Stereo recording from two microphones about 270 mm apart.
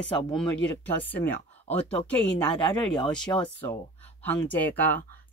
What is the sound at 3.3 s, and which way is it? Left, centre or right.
Speech, centre.